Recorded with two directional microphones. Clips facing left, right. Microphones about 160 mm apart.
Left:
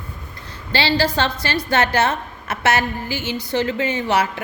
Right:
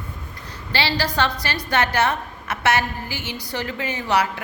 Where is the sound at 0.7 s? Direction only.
30° left (ahead or behind).